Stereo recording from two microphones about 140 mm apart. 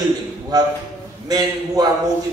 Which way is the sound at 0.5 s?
30° right (ahead or behind).